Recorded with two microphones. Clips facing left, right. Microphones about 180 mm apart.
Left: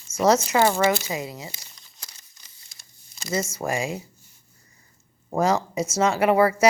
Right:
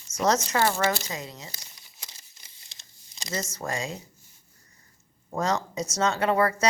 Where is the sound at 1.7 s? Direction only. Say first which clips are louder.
Even; 10° right (ahead or behind).